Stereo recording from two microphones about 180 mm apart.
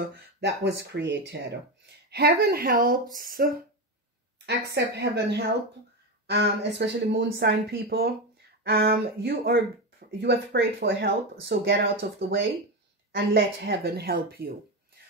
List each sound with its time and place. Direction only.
0.0 s speech: 60° right (ahead or behind)
0.7 s speech: 75° right (ahead or behind); by 3.5 s 50° right (ahead or behind)
4.5 s speech: 65° right (ahead or behind)
13.1 s speech: 60° right (ahead or behind)